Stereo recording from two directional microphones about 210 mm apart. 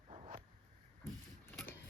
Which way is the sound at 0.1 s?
30° right (ahead or behind).